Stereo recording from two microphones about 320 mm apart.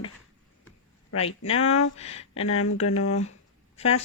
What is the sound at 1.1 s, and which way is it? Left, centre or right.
Speech, centre.